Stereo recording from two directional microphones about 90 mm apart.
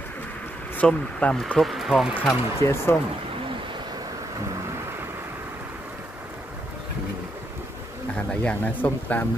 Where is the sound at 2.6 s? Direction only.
30° left (ahead or behind).